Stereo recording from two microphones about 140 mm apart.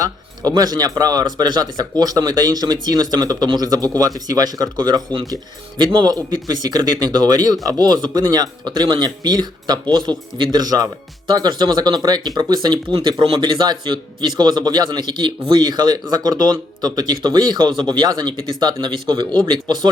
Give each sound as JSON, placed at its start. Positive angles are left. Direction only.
{"t": 0.0, "sound": "speech", "side_deg": -30}
{"t": 12.9, "sound": "speech", "side_deg": -40}